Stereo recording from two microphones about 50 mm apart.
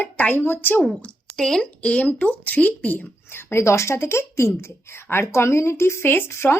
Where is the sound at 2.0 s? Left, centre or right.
Left.